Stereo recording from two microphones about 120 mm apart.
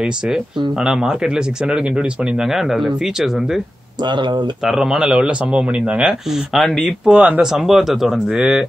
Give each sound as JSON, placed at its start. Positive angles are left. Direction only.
{"t": 0.7, "sound": "speech", "side_deg": -5}
{"t": 4.0, "sound": "speech", "side_deg": -40}
{"t": 4.6, "sound": "speech", "side_deg": -5}
{"t": 7.1, "sound": "speech", "side_deg": -10}